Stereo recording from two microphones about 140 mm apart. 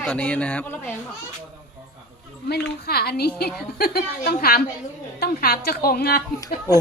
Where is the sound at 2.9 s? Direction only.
90° left.